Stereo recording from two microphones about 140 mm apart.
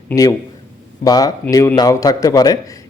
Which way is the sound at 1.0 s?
25° left (ahead or behind).